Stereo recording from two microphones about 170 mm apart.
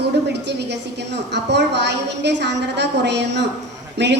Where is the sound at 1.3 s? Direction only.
90° right.